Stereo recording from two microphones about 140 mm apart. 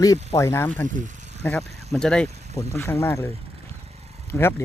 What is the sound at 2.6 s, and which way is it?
Speech, 20° left (ahead or behind).